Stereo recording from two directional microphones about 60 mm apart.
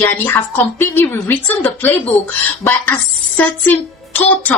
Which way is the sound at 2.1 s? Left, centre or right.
Centre.